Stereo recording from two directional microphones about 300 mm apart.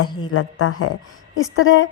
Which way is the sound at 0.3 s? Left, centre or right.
Left.